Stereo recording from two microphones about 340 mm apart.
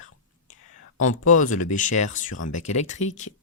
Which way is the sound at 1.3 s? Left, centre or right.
Left.